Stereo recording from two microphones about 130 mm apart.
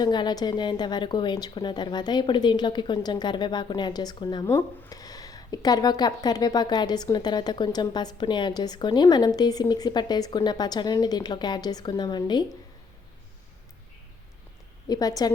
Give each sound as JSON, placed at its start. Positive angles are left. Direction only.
{"t": 0.0, "sound": "speech", "side_deg": 35}
{"t": 14.8, "sound": "a woman's voice", "side_deg": 30}